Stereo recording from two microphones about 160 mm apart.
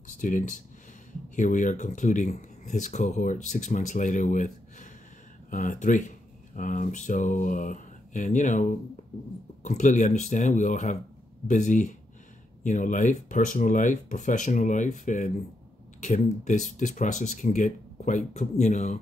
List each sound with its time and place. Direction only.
0.2 s speech: 55° left (ahead or behind)